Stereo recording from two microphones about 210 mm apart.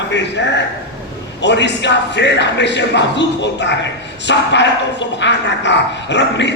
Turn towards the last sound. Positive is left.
turn(degrees=55)  # may be behind; listen again after turning